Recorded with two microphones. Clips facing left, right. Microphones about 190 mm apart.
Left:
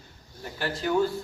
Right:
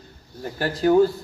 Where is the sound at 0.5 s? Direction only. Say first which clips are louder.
Right 8 dB; 40° right (ahead or behind).